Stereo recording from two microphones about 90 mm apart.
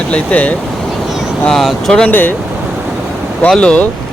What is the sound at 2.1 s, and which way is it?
Speech, 20° left (ahead or behind).